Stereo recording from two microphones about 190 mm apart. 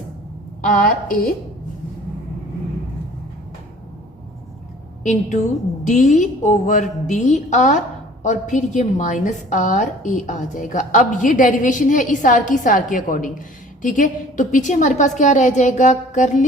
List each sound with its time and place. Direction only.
0.6 s a woman's voice: 45° left (ahead or behind)
5.8 s a woman's voice: 40° left (ahead or behind)